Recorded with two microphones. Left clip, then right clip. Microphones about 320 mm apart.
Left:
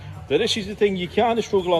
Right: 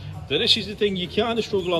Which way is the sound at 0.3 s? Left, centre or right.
Centre.